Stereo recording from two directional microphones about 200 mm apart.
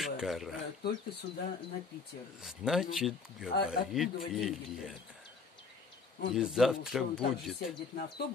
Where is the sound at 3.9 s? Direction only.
Centre (ahead or behind).